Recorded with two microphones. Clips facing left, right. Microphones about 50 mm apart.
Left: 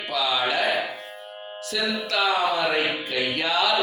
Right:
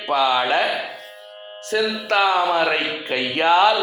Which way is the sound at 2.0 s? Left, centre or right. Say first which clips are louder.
Right 5 dB; right.